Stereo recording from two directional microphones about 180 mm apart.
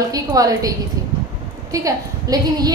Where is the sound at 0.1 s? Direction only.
20° right (ahead or behind).